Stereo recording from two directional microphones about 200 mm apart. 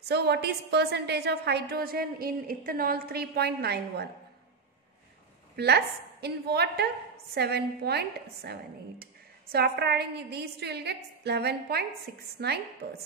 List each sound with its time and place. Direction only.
0.1 s a woman's voice: 55° right (ahead or behind)
5.6 s a woman's voice: 55° right (ahead or behind)